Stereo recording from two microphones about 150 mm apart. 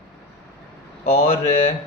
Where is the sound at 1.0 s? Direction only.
45° left (ahead or behind).